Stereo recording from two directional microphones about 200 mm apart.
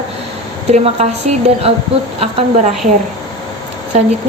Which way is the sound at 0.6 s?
30° right (ahead or behind).